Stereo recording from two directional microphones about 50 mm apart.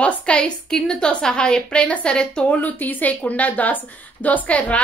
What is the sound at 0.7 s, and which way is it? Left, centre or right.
A woman's voice, centre.